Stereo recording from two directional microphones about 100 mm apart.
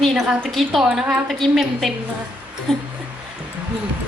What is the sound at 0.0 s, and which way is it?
A woman's voice, centre (ahead or behind).